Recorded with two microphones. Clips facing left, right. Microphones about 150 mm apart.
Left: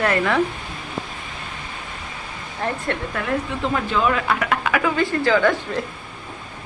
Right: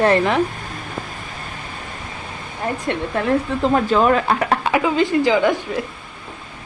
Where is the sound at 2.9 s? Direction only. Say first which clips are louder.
Right 4 dB; 20° right (ahead or behind).